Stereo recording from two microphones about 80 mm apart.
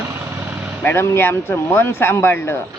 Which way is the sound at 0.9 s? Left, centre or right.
Left.